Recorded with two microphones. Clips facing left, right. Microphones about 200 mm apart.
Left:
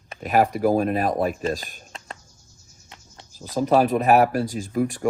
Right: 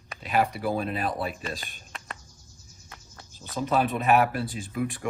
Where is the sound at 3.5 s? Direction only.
35° left (ahead or behind).